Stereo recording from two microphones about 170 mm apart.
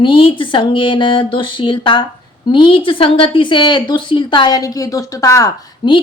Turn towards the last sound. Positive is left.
turn(degrees=25)  # may be behind; listen again after turning